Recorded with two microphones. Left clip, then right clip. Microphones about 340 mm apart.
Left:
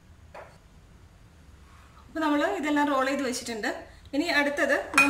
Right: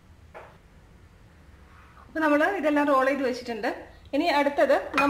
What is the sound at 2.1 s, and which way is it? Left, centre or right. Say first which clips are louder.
A woman's voice: right 3 dB; centre.